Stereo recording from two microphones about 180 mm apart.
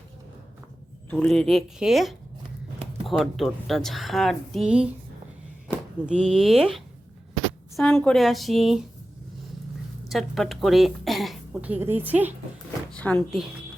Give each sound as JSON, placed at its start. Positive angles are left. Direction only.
{"t": 1.1, "sound": "a woman's voice", "side_deg": 5}
{"t": 10.1, "sound": "a woman's voice", "side_deg": 0}
{"t": 12.9, "sound": "speech", "side_deg": 5}